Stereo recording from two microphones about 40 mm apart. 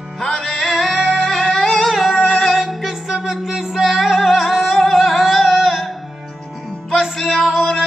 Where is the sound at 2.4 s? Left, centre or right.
Centre.